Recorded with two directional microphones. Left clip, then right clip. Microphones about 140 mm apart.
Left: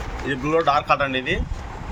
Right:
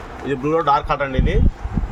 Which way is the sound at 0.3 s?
50° right (ahead or behind).